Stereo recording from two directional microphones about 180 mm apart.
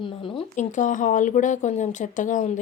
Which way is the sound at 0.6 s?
45° left (ahead or behind).